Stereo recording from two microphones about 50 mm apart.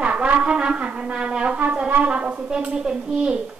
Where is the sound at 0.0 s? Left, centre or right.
Right.